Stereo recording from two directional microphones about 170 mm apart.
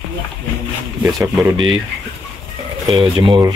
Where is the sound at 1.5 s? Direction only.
30° right (ahead or behind).